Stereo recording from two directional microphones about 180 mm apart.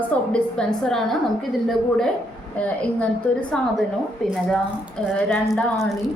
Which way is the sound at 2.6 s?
5° left (ahead or behind).